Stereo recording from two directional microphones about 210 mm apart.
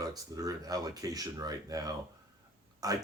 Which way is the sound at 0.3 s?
15° right (ahead or behind).